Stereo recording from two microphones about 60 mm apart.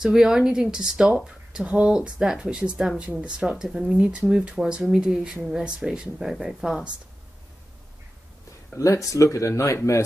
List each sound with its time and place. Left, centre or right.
0.0 s speech: centre
8.7 s speech: left